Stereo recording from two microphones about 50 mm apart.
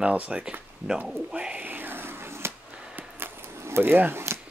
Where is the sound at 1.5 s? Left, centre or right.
Right.